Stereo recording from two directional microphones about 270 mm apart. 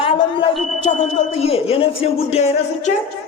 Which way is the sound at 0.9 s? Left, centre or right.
Left.